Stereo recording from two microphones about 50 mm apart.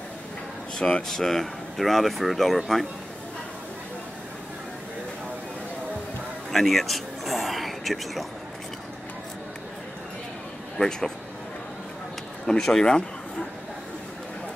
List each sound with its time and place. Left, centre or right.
0.7 s speech: left
1.0 s speech: centre
6.5 s a sound: centre
10.8 s speech: centre
12.4 s speech: centre